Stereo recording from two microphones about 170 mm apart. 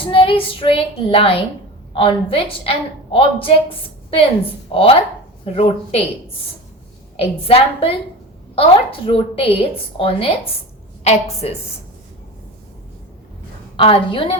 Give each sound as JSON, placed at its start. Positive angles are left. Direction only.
{"t": 0.0, "sound": "a woman's voice", "side_deg": 30}
{"t": 4.7, "sound": "a woman's voice", "side_deg": 30}
{"t": 7.2, "sound": "a woman's voice", "side_deg": 35}
{"t": 13.7, "sound": "a woman's voice", "side_deg": 35}